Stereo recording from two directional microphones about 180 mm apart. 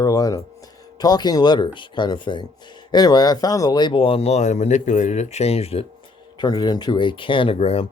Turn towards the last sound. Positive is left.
turn(degrees=35)  # may be behind; listen again after turning